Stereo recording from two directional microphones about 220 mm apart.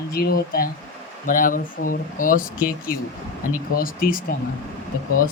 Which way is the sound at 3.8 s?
40° left (ahead or behind).